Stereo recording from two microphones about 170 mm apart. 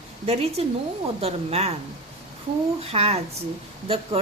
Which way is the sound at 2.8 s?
35° right (ahead or behind).